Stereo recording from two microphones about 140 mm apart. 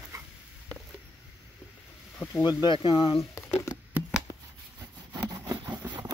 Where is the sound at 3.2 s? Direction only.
20° left (ahead or behind).